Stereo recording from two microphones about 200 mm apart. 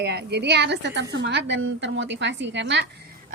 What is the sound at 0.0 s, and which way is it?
A woman's voice, 55° right (ahead or behind).